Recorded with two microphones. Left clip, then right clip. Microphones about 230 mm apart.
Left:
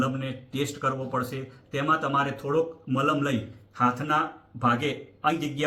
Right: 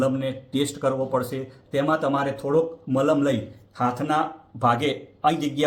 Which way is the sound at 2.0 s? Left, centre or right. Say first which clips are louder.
Right 2 dB; centre.